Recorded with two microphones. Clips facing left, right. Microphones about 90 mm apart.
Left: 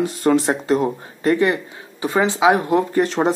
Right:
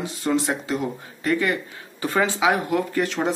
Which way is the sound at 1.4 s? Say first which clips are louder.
Left 6 dB; 20° left (ahead or behind).